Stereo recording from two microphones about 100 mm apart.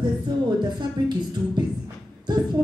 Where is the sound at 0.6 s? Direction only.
50° right (ahead or behind).